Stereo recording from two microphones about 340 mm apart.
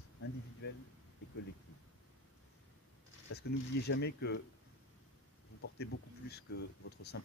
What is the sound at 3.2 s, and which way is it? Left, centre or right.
Speech, left.